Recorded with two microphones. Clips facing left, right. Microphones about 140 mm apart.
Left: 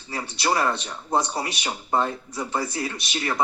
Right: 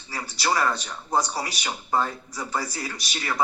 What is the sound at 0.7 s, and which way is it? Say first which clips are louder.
Speech: left 1 dB; 25° left (ahead or behind).